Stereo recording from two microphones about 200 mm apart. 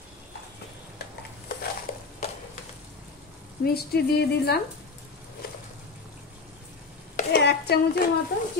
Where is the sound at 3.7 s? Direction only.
50° left (ahead or behind).